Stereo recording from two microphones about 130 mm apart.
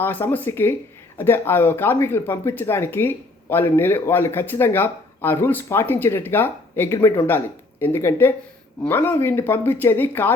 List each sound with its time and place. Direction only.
0.0 s speech: 15° left (ahead or behind)